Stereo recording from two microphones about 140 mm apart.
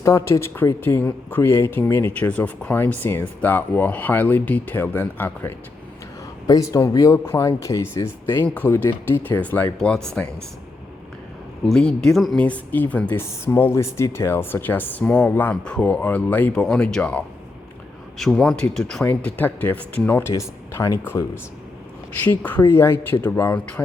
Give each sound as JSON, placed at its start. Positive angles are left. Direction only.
{"t": 0.0, "sound": "speech", "side_deg": 20}
{"t": 11.7, "sound": "speech", "side_deg": 5}
{"t": 12.5, "sound": "speech", "side_deg": 10}